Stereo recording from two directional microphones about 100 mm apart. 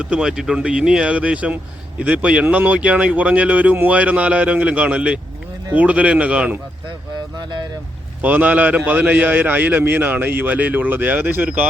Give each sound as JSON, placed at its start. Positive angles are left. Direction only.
{"t": 0.0, "sound": "a man's voice", "side_deg": -10}
{"t": 8.2, "sound": "a man's voice", "side_deg": -15}